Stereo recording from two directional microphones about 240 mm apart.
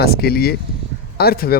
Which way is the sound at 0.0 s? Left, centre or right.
Left.